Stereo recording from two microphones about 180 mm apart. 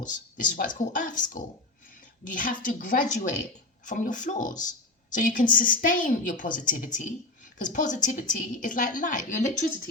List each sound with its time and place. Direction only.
0.0 s a woman's voice: 45° left (ahead or behind)